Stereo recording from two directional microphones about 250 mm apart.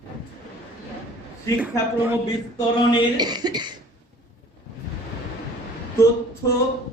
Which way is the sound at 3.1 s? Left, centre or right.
Centre.